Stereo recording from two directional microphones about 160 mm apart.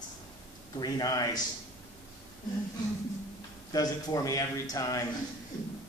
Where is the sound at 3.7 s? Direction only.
25° left (ahead or behind).